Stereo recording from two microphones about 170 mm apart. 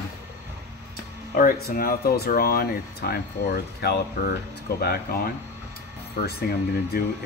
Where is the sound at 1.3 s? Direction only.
55° left (ahead or behind).